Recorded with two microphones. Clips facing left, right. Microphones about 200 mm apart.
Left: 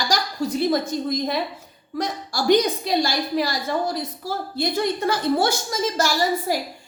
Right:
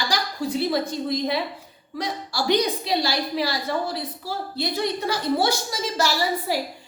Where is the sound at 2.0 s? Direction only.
45° left (ahead or behind).